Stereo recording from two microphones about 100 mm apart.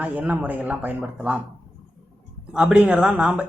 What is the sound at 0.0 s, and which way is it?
Speech, 15° right (ahead or behind).